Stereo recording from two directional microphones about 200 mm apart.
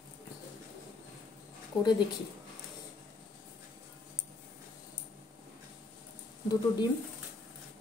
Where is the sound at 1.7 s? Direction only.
25° left (ahead or behind).